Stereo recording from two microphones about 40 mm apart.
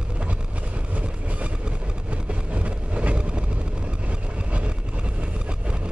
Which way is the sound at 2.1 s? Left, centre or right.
Right.